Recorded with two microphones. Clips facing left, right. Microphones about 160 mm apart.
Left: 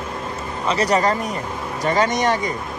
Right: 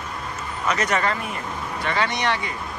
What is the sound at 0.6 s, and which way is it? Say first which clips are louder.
Speech: left 5 dB; 35° left (ahead or behind).